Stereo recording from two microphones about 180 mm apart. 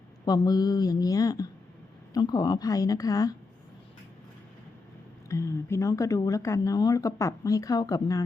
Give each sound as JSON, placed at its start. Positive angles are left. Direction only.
{"t": 0.3, "sound": "speech", "side_deg": 20}
{"t": 5.3, "sound": "speech", "side_deg": 15}